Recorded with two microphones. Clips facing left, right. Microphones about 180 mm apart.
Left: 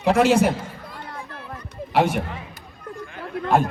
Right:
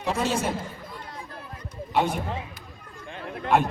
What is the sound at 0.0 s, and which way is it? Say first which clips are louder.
Speech: left 9 dB; 85° left.